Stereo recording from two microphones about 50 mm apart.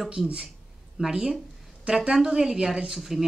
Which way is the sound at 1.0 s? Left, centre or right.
Centre.